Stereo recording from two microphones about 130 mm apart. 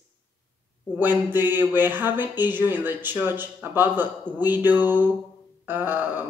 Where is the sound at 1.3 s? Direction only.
15° right (ahead or behind).